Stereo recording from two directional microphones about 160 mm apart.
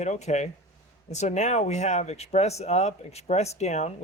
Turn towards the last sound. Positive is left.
turn(degrees=45)  # may be behind; listen again after turning